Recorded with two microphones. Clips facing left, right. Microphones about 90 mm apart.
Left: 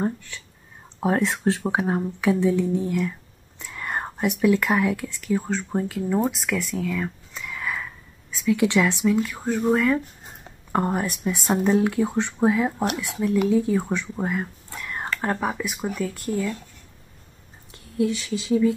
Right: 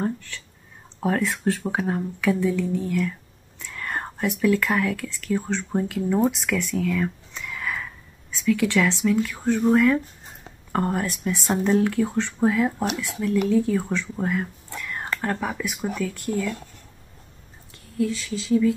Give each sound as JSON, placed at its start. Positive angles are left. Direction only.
{"t": 0.0, "sound": "speech", "side_deg": 15}
{"t": 8.5, "sound": "speech", "side_deg": 15}
{"t": 10.7, "sound": "speech", "side_deg": 15}
{"t": 15.9, "sound": "speech", "side_deg": 0}